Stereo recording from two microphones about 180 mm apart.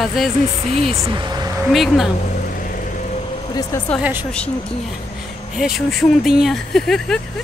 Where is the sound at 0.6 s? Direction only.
35° right (ahead or behind).